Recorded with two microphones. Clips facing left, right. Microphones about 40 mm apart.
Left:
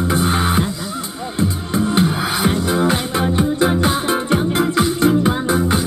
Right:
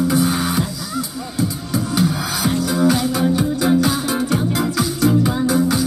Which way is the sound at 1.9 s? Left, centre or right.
Left.